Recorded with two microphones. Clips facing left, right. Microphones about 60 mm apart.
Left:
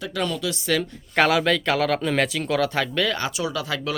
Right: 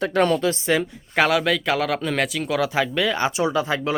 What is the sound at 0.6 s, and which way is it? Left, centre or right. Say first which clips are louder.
Speech: right 2 dB; right.